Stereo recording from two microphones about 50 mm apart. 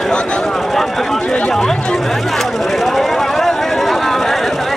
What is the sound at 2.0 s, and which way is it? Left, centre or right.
Chatter, centre.